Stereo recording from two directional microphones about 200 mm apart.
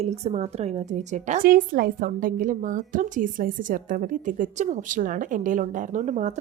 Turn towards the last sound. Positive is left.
turn(degrees=-35)  # may be behind; listen again after turning